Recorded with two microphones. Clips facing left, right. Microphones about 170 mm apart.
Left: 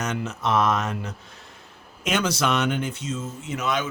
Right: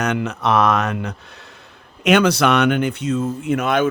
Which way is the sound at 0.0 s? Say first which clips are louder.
Right 6 dB; 65° right (ahead or behind).